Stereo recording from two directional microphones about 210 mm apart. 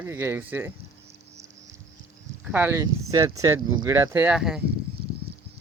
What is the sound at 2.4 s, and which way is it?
Speech, 10° right (ahead or behind).